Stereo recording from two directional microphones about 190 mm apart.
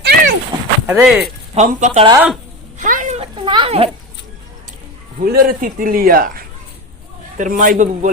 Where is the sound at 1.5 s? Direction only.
40° right (ahead or behind).